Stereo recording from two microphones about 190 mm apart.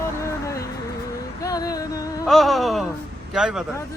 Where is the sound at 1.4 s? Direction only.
20° left (ahead or behind).